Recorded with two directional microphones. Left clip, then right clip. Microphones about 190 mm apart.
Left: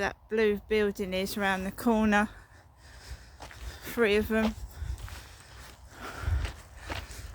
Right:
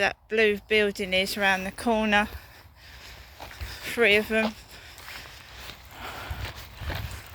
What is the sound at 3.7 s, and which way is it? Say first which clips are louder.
Speech: right 5 dB; 30° left (ahead or behind).